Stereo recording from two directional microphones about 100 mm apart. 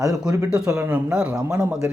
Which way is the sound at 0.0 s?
35° right (ahead or behind).